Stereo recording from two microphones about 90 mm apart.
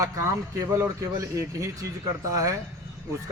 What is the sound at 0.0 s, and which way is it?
Speech, 40° right (ahead or behind).